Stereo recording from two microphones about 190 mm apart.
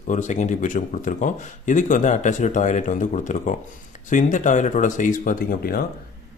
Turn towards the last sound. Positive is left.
turn(degrees=50)  # may be behind; listen again after turning